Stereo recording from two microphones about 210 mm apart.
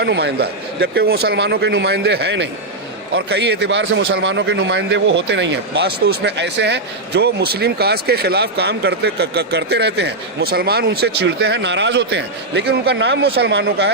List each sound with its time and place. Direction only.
0.0 s speech: 50° right (ahead or behind)